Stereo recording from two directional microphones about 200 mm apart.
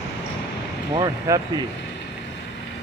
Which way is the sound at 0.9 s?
20° right (ahead or behind).